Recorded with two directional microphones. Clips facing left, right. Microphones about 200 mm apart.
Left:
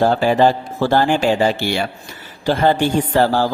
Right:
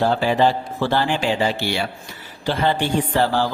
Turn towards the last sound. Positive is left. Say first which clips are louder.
# left 4 dB
turn(degrees=45)  # may be behind; listen again after turning